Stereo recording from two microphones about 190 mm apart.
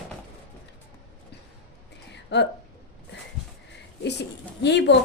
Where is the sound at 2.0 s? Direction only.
65° left (ahead or behind).